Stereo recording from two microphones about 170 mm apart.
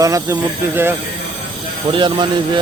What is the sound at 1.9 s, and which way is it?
Speech, 25° right (ahead or behind).